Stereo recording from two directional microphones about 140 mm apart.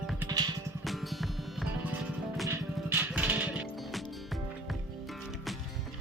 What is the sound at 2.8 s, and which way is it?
Music, 15° right (ahead or behind).